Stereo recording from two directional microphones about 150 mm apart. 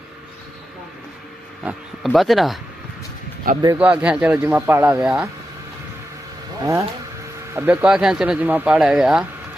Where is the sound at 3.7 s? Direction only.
10° right (ahead or behind).